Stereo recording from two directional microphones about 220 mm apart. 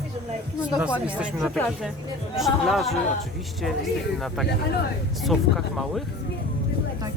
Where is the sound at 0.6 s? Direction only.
5° right (ahead or behind).